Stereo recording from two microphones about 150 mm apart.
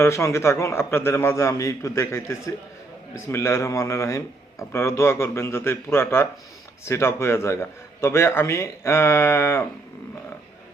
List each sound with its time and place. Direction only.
0.0 s a man's voice: 20° left (ahead or behind)